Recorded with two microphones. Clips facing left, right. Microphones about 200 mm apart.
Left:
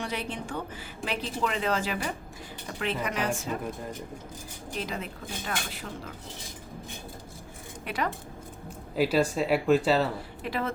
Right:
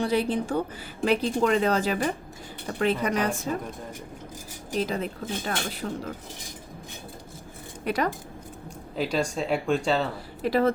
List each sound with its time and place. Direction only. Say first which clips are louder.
0.0 s a woman's voice: right 9 dB; 35° right (ahead or behind)
4.7 s a woman's voice: right 7 dB; 35° right (ahead or behind)
7.9 s a woman's voice: right 5 dB; 40° right (ahead or behind)
9.0 s speech: left 2 dB; 5° left (ahead or behind)
10.4 s a woman's voice: right 9 dB; 40° right (ahead or behind)